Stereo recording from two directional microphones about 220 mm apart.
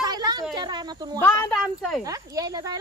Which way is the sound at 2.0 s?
15° right (ahead or behind).